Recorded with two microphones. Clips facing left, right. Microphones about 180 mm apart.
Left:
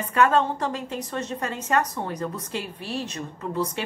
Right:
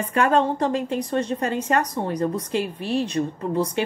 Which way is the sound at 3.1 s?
35° right (ahead or behind).